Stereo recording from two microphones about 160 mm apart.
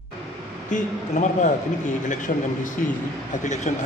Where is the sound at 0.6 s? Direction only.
50° left (ahead or behind).